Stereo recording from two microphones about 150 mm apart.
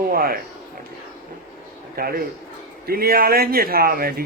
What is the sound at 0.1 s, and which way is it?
Speech, 80° right.